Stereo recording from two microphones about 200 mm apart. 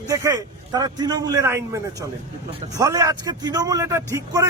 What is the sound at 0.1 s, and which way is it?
A man's voice, 15° right (ahead or behind).